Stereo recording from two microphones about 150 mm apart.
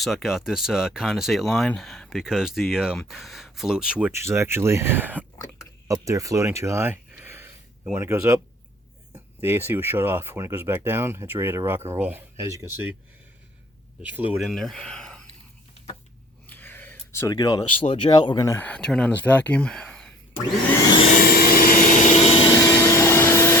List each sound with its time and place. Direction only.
0.0 s speech: centre (ahead or behind)
14.0 s speech: 10° right (ahead or behind)
14.5 s speech: centre (ahead or behind)
16.5 s a sound: 10° left (ahead or behind)
17.3 s speech: 25° left (ahead or behind); by 20.1 s 5° left (ahead or behind)
21.2 s vacuum cleaner: 80° left; by 22.4 s 45° left (ahead or behind)
22.5 s vacuum cleaner: 25° left (ahead or behind)